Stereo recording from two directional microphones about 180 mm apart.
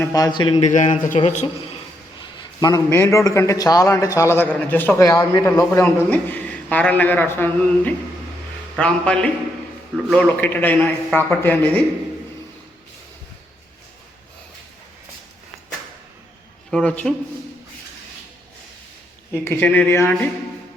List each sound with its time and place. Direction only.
0.0 s a man's voice: 20° left (ahead or behind)
0.6 s a man's voice: 40° left (ahead or behind)
2.6 s a man's voice: 20° left (ahead or behind)
16.7 s a man's voice: 5° left (ahead or behind)
19.3 s a man's voice: 10° left (ahead or behind)